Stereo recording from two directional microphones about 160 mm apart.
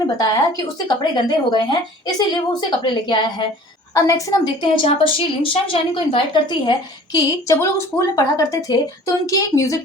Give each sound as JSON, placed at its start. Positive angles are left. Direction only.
{"t": 0.2, "sound": "a woman's voice", "side_deg": 25}